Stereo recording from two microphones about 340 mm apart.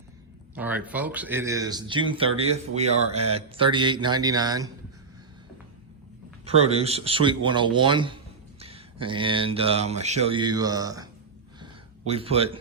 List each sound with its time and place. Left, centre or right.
0.5 s speech: centre
6.4 s speech: centre
11.6 s a sound: centre